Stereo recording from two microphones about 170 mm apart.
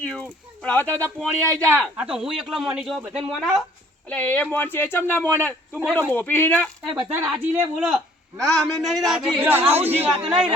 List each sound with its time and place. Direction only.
0.0 s speech: 5° left (ahead or behind)
1.8 s speech: 5° right (ahead or behind)
4.1 s a man's voice: 10° left (ahead or behind)
7.0 s speech: 10° right (ahead or behind)
9.6 s speech: 35° right (ahead or behind)
10.2 s speech: 5° right (ahead or behind)